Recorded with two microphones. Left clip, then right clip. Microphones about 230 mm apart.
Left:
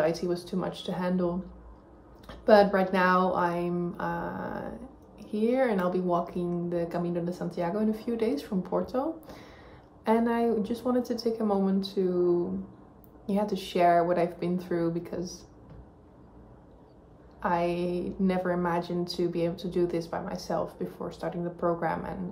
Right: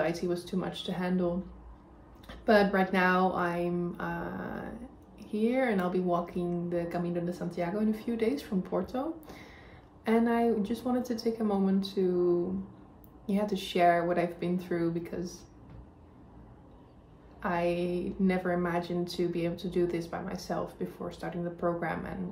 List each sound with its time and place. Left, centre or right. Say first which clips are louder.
0.0 s a woman's voice: left 3 dB; centre
17.4 s a woman's voice: left 2 dB; centre